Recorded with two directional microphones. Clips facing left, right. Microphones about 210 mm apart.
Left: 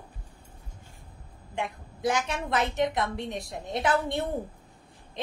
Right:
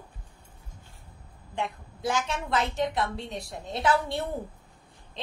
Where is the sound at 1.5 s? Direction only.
20° left (ahead or behind).